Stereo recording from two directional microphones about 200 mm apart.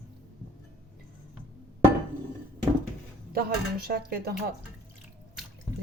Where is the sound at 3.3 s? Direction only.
50° right (ahead or behind).